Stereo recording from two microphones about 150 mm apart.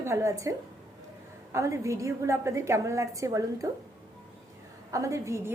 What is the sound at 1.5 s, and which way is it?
A woman's voice, 20° right (ahead or behind).